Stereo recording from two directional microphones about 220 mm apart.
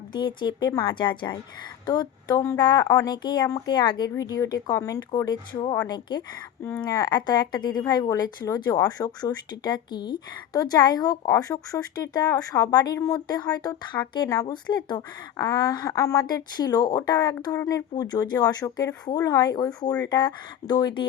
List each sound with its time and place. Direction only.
0.1 s speech: 20° left (ahead or behind)